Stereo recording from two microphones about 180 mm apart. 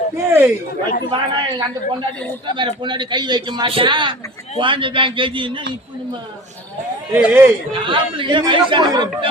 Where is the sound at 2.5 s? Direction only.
25° right (ahead or behind).